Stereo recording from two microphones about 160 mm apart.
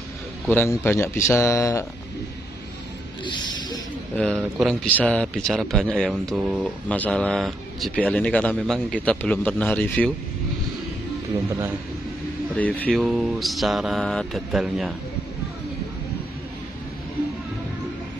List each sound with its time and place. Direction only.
0.5 s speech: 15° left (ahead or behind)
3.3 s a sound: 25° left (ahead or behind)
4.2 s speech: 5° left (ahead or behind)
6.9 s speech: 5° left (ahead or behind)
12.5 s speech: 10° left (ahead or behind)
13.0 s speech: centre (ahead or behind)